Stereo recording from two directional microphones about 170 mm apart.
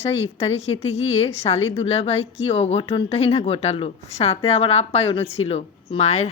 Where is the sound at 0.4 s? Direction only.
35° left (ahead or behind).